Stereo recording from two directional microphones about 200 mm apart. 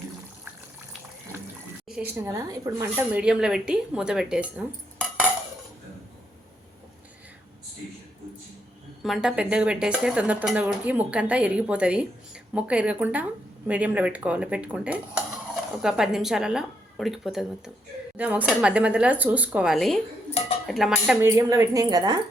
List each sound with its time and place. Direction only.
1.9 s speech: 10° right (ahead or behind)
9.0 s speech: centre (ahead or behind); by 22.2 s 20° right (ahead or behind)